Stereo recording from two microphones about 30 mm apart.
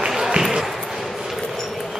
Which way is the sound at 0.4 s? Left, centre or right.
Centre.